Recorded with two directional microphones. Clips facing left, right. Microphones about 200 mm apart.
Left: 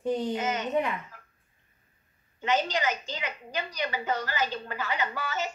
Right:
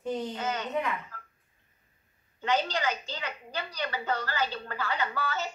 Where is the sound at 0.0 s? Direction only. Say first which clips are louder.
Left 4 dB; 15° left (ahead or behind).